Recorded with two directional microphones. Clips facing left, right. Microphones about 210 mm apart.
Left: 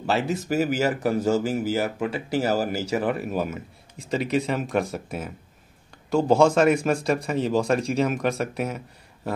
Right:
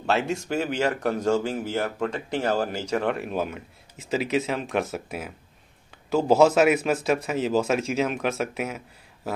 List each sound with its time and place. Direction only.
0.0 s speech: centre (ahead or behind)